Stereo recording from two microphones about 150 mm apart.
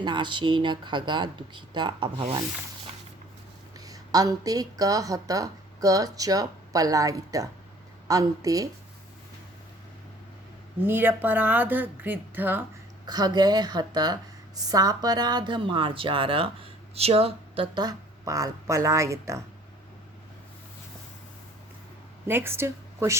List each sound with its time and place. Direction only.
0.0 s speech: 30° right (ahead or behind)
3.8 s a woman's voice: 25° right (ahead or behind)
10.8 s speech: 15° right (ahead or behind)
13.1 s a woman's voice: 25° right (ahead or behind)
22.3 s a woman's voice: 15° right (ahead or behind)